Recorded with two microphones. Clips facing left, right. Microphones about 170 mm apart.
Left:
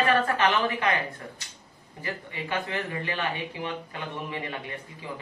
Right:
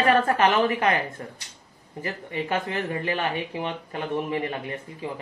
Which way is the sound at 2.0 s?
35° right (ahead or behind).